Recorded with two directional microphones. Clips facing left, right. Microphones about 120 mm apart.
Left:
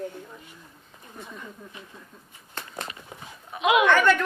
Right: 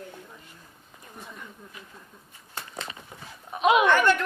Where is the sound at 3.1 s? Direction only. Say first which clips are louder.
Left 2 dB; 20° left (ahead or behind).